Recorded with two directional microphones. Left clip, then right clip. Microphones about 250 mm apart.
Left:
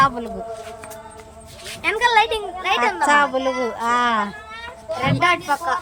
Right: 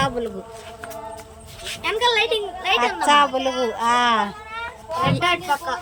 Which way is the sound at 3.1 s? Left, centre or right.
Centre.